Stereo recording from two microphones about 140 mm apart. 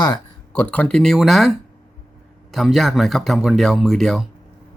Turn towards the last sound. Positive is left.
turn(degrees=0)  # may be behind; listen again after turning